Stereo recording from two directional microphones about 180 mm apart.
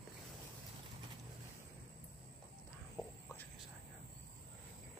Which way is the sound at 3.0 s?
20° left (ahead or behind).